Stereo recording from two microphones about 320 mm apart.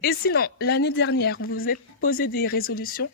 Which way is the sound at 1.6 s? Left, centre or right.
Left.